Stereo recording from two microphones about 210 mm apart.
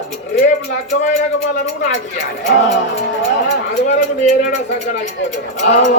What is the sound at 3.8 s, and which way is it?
Speech, 35° left (ahead or behind).